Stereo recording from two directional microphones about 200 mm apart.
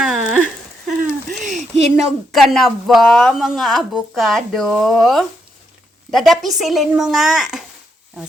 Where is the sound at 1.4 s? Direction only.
35° right (ahead or behind).